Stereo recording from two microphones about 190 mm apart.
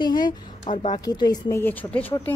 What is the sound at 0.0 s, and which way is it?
Speech, 20° left (ahead or behind).